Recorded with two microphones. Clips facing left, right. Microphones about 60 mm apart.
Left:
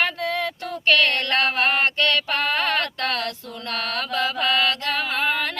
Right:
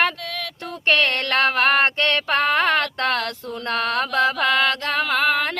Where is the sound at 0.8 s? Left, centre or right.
Right.